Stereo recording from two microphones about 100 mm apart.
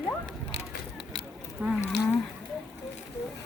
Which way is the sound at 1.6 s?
15° right (ahead or behind).